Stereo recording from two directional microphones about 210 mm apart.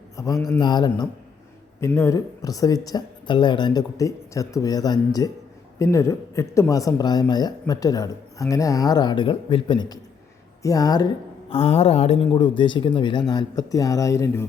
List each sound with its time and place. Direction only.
0.2 s a woman's voice: 15° left (ahead or behind)